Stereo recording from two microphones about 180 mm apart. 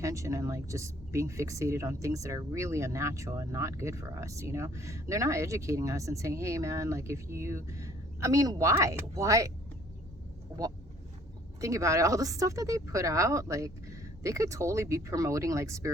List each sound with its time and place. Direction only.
0.0 s speech: 15° right (ahead or behind)
10.5 s speech: 15° right (ahead or behind)